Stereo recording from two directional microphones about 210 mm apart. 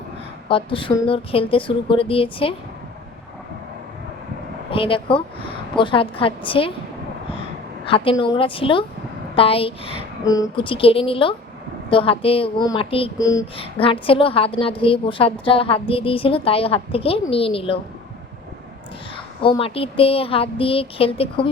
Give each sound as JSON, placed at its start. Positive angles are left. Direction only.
{"t": 0.4, "sound": "a woman's voice", "side_deg": 25}
{"t": 4.7, "sound": "a woman's voice", "side_deg": 25}
{"t": 7.9, "sound": "a woman's voice", "side_deg": 25}
{"t": 10.2, "sound": "a woman's voice", "side_deg": 15}
{"t": 13.1, "sound": "speech", "side_deg": 15}
{"t": 13.6, "sound": "a woman's voice", "side_deg": 25}
{"t": 19.1, "sound": "a woman's voice", "side_deg": 25}